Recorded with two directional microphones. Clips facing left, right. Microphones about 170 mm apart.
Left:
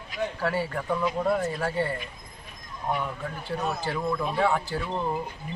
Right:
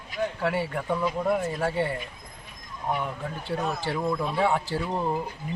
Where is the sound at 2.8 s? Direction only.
10° right (ahead or behind).